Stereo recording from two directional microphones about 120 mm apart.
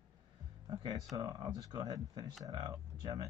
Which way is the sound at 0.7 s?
35° right (ahead or behind).